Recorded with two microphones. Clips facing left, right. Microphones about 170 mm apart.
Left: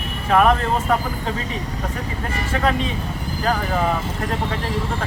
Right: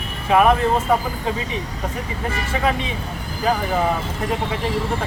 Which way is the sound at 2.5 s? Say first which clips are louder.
Left 1 dB; 10° right (ahead or behind).